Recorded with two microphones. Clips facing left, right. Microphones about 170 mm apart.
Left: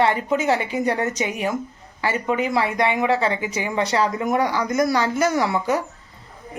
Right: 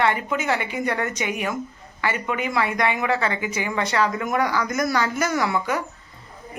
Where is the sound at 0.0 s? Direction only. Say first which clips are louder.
Left 3 dB; 35° left (ahead or behind).